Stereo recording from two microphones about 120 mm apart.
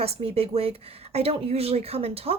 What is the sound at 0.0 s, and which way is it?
A woman's voice, 55° right (ahead or behind).